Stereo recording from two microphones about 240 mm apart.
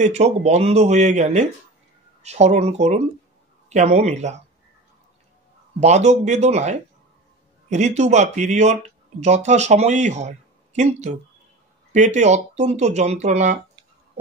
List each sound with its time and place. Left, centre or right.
0.0 s speech: right
5.8 s speech: right